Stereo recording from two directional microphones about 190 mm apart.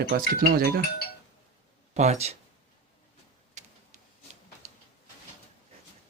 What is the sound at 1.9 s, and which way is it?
Speech, 35° right (ahead or behind).